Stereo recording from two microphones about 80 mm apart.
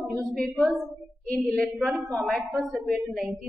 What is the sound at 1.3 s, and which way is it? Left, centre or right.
A woman's voice, centre.